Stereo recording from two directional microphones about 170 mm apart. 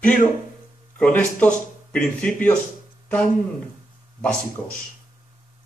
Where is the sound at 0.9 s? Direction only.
10° left (ahead or behind).